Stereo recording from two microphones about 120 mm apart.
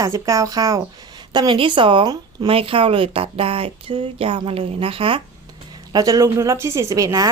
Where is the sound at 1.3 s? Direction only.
45° right (ahead or behind).